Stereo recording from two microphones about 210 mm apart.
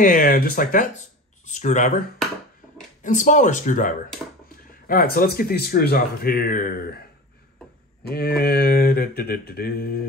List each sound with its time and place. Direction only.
0.0 s speech: 40° left (ahead or behind)
8.1 s speech: 45° left (ahead or behind)